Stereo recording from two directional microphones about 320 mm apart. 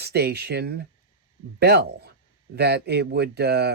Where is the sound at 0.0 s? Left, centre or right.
Right.